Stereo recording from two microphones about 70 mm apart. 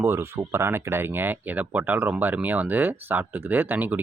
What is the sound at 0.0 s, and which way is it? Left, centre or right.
Speech, right.